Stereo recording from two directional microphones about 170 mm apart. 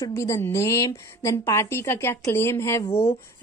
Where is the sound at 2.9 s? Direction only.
35° left (ahead or behind).